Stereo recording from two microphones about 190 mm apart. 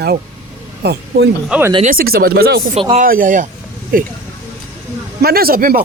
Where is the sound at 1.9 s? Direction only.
50° right (ahead or behind).